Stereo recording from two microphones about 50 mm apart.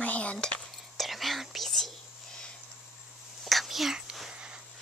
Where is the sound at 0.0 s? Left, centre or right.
Left.